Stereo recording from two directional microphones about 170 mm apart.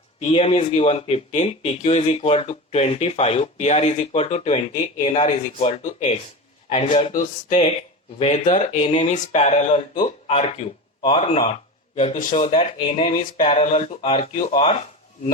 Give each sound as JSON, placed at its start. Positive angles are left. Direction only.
{"t": 0.2, "sound": "a man's voice", "side_deg": 35}